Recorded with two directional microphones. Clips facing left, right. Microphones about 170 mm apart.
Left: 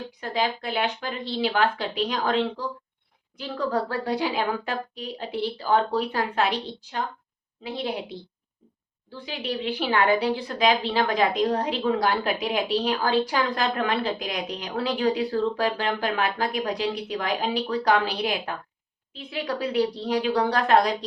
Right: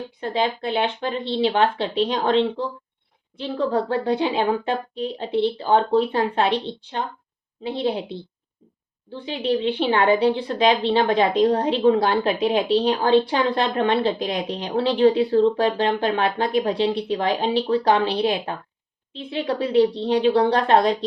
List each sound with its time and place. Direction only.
0.2 s speech: 25° right (ahead or behind)